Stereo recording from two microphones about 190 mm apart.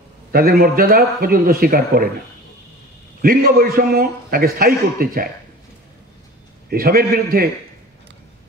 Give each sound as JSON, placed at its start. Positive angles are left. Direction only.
{"t": 0.3, "sound": "a man's voice", "side_deg": -50}
{"t": 3.2, "sound": "a man's voice", "side_deg": -50}
{"t": 6.7, "sound": "a man's voice", "side_deg": -50}